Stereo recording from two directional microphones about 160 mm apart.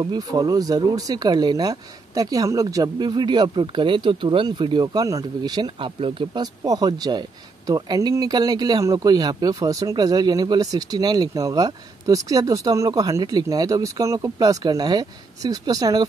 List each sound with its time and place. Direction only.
0.0 s speech: 25° right (ahead or behind)